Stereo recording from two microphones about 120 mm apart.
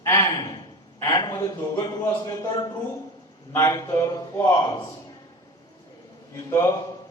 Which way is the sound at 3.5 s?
25° left (ahead or behind).